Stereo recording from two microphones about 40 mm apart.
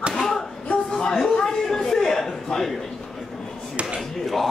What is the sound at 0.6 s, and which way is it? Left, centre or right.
A man's voice, centre.